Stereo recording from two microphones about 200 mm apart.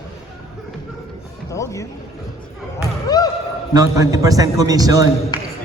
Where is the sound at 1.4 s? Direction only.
15° left (ahead or behind).